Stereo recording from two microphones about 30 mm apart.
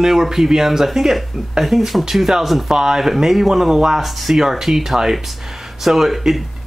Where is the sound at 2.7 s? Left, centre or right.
Centre.